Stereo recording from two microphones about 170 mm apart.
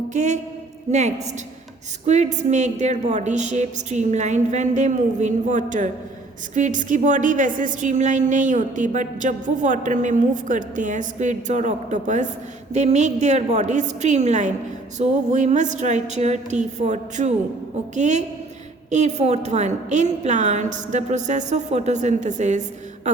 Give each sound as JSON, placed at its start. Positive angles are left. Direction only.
{"t": 0.1, "sound": "a woman's voice", "side_deg": -45}